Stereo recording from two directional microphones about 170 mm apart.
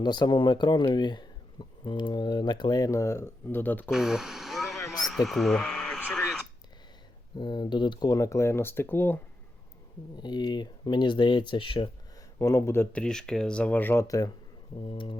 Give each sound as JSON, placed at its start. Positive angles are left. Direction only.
{"t": 0.0, "sound": "speech", "side_deg": 25}
{"t": 3.9, "sound": "a sound", "side_deg": -5}
{"t": 4.9, "sound": "radio", "side_deg": 0}
{"t": 7.3, "sound": "speech", "side_deg": 25}
{"t": 10.2, "sound": "speech", "side_deg": 25}
{"t": 12.4, "sound": "speech", "side_deg": 15}
{"t": 14.8, "sound": "speech", "side_deg": 30}